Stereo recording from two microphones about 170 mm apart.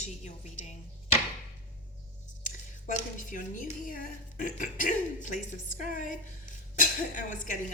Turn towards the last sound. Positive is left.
turn(degrees=50)  # may be behind; listen again after turning